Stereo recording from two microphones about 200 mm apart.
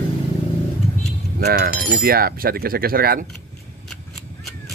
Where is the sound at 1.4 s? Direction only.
50° right (ahead or behind).